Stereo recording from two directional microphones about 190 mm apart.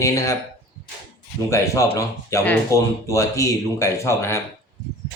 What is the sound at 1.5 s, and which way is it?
Speech, 15° left (ahead or behind).